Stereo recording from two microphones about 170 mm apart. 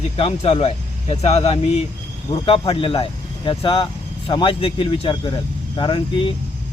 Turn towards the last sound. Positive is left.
turn(degrees=30)  # may be behind; listen again after turning